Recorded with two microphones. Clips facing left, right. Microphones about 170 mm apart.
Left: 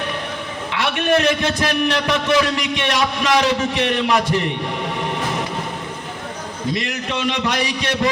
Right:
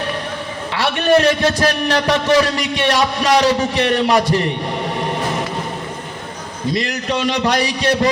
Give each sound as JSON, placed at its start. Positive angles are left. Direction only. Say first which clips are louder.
{"t": 0.7, "sound": "a man's voice", "louder": "right 4 dB", "side_deg": -35}
{"t": 6.7, "sound": "a man's voice", "louder": "right 4 dB", "side_deg": -35}